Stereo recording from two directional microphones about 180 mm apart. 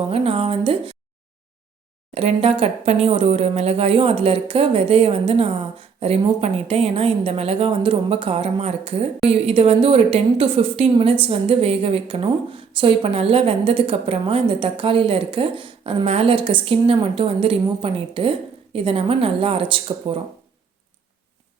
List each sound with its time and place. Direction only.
0.0 s speech: 30° right (ahead or behind)
2.1 s speech: 35° right (ahead or behind)